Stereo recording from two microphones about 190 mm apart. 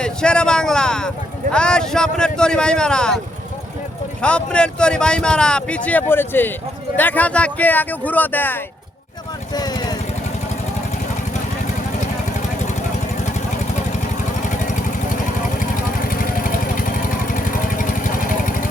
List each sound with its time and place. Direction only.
0.0 s speech: 5° left (ahead or behind)
4.2 s speech: 5° left (ahead or behind)
9.5 s vehicle: 20° left (ahead or behind)
14.5 s vehicle: 40° left (ahead or behind)